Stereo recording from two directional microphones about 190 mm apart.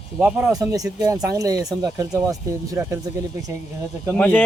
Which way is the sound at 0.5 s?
20° right (ahead or behind).